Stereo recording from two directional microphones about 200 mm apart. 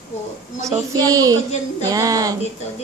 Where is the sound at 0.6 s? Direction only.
15° right (ahead or behind).